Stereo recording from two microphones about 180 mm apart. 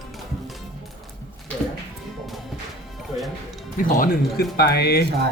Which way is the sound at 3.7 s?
50° left (ahead or behind).